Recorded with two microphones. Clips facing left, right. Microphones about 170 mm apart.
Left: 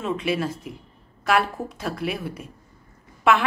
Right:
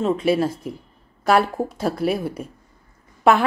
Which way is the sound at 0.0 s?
35° right (ahead or behind).